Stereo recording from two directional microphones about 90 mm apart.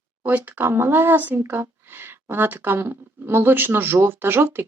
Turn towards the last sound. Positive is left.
turn(degrees=-25)  # may be behind; listen again after turning